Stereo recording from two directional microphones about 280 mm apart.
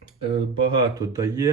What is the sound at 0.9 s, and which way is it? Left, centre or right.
Speech, centre.